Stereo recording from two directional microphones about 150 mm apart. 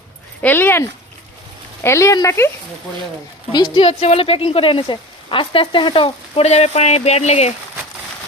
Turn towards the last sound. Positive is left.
turn(degrees=45)  # may be behind; listen again after turning